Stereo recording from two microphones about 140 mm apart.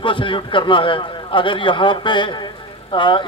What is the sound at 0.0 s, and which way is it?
A man's voice, 35° left (ahead or behind).